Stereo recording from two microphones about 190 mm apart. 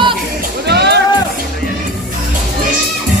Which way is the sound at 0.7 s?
60° right (ahead or behind).